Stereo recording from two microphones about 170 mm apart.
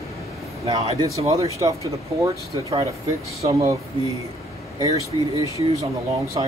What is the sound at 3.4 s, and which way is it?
Speech, 20° right (ahead or behind).